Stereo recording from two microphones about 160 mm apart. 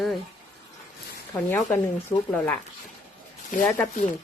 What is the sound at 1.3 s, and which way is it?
Speech, 15° left (ahead or behind).